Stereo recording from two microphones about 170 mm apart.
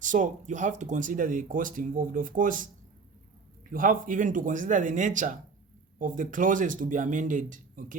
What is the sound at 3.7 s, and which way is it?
Speech, 50° right (ahead or behind).